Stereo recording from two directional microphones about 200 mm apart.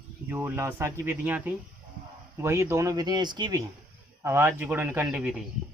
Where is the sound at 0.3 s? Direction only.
10° right (ahead or behind).